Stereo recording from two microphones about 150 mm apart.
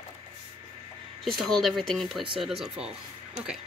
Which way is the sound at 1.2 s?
Centre (ahead or behind).